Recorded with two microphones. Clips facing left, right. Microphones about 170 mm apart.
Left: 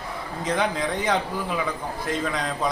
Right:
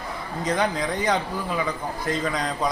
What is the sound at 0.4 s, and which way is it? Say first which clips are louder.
A man's voice: even; centre (ahead or behind).